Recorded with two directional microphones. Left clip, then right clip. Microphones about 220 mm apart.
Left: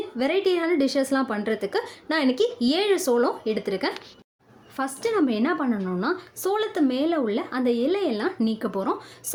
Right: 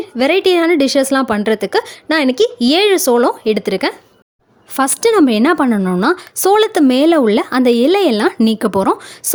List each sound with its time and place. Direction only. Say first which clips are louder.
0.2 s a woman's voice: right 11 dB; 45° right (ahead or behind)